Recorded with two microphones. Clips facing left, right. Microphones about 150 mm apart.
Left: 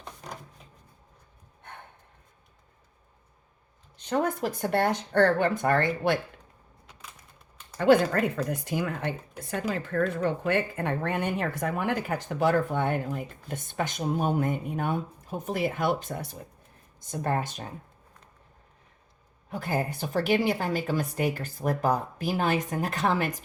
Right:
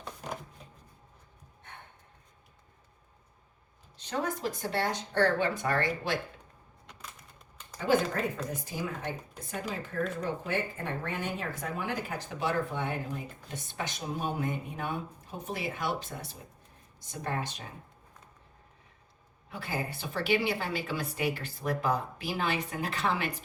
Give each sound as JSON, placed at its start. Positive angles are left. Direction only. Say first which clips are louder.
{"t": 3.9, "sound": "a woman's voice", "louder": "left 6 dB", "side_deg": 55}
{"t": 7.8, "sound": "a woman's voice", "louder": "left 7 dB", "side_deg": 65}
{"t": 19.5, "sound": "a woman's voice", "louder": "left 6 dB", "side_deg": 45}